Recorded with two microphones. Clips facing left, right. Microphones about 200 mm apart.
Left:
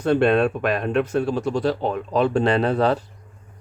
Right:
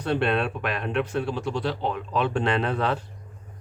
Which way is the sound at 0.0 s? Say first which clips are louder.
Left 7 dB; 45° left (ahead or behind).